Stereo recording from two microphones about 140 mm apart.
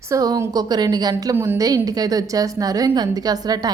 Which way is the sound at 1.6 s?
25° right (ahead or behind).